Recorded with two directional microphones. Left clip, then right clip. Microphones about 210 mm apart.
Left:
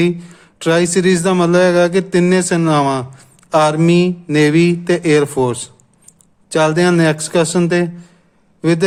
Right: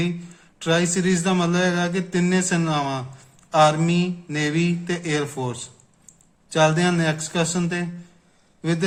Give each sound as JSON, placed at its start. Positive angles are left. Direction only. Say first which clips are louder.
{"t": 0.0, "sound": "speech", "louder": "left 12 dB", "side_deg": 50}